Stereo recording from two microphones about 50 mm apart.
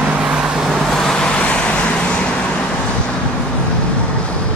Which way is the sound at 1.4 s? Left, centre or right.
Left.